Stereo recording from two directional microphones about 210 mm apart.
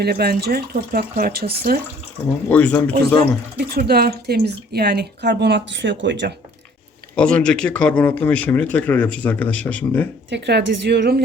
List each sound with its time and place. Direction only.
0.0 s speech: 50° right (ahead or behind)
2.5 s speech: 5° left (ahead or behind)
3.2 s speech: 45° right (ahead or behind)
7.2 s speech: 5° left (ahead or behind)
10.2 s speech: 55° right (ahead or behind)